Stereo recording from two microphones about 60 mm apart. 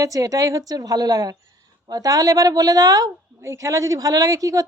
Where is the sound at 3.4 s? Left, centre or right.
Right.